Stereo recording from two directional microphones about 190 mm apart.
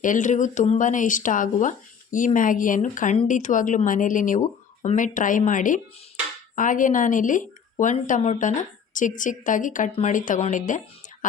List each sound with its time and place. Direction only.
0.0 s a woman's voice: 40° left (ahead or behind)